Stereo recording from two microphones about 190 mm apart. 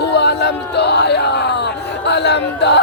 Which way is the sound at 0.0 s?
60° left (ahead or behind).